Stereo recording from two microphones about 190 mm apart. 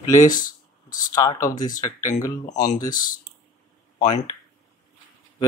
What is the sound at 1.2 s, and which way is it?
Speech, 20° left (ahead or behind).